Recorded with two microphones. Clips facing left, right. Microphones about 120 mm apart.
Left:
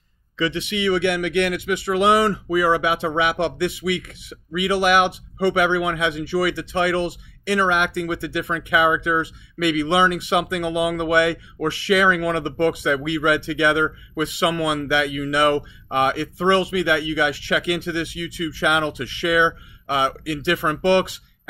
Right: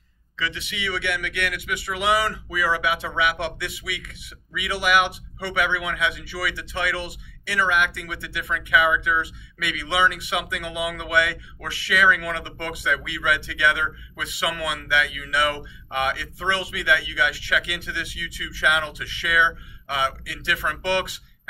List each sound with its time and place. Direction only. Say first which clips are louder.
0.4 s speech: left 8 dB; 25° left (ahead or behind)